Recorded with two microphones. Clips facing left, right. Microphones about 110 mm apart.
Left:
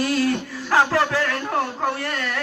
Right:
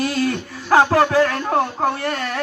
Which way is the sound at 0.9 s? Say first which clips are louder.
Right 5 dB; 35° right (ahead or behind).